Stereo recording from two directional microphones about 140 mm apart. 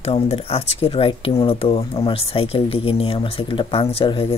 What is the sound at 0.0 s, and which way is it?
Speech, 45° left (ahead or behind).